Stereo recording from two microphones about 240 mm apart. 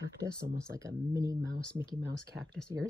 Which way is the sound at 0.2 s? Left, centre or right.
Centre.